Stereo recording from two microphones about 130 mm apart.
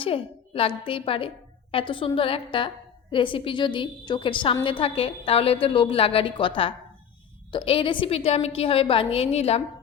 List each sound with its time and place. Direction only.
0.0 s a woman's voice: 45° left (ahead or behind)